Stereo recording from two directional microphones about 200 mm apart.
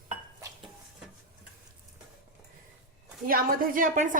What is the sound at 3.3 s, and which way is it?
Speech, 45° right (ahead or behind).